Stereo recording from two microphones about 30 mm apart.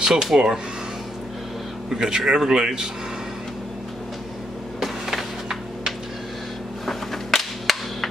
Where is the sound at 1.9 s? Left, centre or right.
Centre.